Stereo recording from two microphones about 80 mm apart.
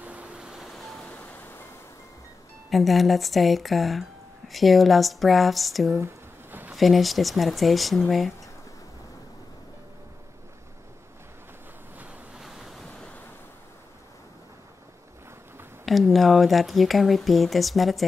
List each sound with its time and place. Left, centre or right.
0.0 s vehicle: centre
1.1 s music: left
2.7 s speech: centre
12.4 s waves: centre
15.8 s speech: centre